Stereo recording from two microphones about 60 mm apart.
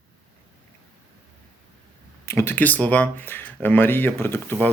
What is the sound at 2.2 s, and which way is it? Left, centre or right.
Speech, left.